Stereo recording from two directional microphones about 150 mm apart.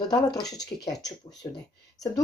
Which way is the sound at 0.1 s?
25° left (ahead or behind).